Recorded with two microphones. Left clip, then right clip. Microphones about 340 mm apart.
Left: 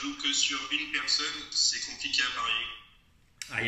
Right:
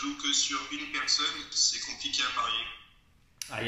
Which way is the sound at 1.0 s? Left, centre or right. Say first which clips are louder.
Right 1 dB; right.